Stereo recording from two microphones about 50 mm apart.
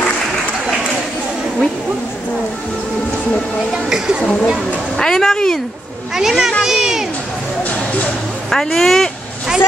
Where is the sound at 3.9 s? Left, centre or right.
Centre.